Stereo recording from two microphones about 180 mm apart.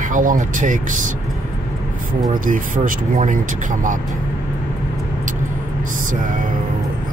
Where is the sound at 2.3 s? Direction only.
50° right (ahead or behind).